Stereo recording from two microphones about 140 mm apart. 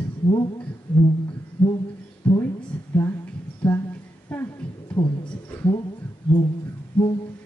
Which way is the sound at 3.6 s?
10° left (ahead or behind).